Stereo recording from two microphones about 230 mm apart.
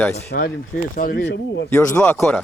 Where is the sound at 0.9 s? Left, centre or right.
Left.